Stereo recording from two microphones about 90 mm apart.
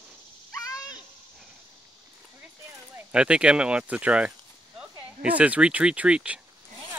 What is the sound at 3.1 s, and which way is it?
Speech, 10° right (ahead or behind).